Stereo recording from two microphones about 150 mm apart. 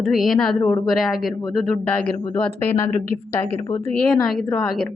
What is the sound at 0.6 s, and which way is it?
Speech, 15° left (ahead or behind).